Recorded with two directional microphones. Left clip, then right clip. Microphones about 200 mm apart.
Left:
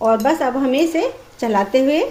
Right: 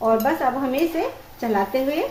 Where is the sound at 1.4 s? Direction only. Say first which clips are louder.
Left 5 dB; 45° left (ahead or behind).